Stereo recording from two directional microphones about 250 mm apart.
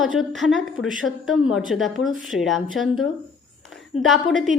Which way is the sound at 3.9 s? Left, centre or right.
Left.